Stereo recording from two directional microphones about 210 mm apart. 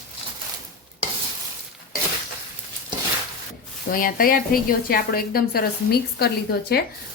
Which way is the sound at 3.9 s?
40° left (ahead or behind).